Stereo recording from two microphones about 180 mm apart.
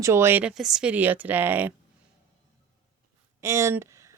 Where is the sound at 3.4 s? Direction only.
15° right (ahead or behind).